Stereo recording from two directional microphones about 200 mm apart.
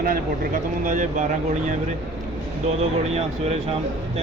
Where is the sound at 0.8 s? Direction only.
40° right (ahead or behind).